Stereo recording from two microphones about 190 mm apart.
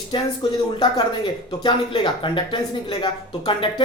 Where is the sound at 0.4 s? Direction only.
25° left (ahead or behind).